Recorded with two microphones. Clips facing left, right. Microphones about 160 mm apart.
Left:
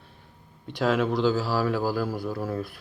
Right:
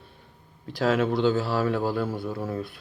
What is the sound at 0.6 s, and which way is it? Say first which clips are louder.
A man's voice: right 1 dB; centre (ahead or behind).